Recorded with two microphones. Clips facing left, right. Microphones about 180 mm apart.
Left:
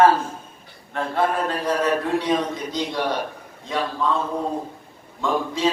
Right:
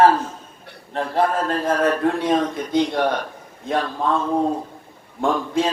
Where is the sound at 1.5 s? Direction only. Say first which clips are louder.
Right 2 dB; 50° right (ahead or behind).